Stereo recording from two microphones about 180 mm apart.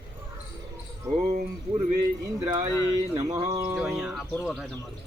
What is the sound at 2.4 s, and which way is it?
Speech, 25° right (ahead or behind).